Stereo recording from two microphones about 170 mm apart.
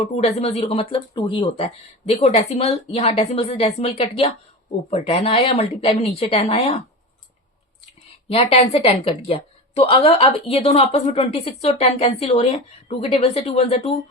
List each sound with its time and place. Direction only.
0.0 s speech: 40° left (ahead or behind)
8.3 s speech: 35° left (ahead or behind)